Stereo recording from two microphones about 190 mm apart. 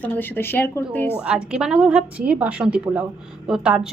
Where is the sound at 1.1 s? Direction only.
5° right (ahead or behind).